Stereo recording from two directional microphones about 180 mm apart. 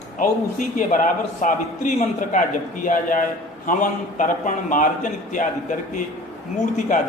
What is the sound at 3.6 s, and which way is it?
A man's voice, 45° left (ahead or behind).